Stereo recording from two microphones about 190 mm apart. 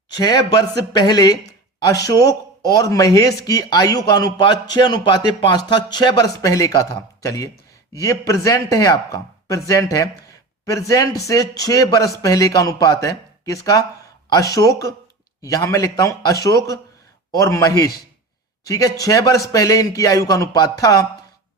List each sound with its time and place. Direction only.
0.1 s a man's voice: 20° left (ahead or behind)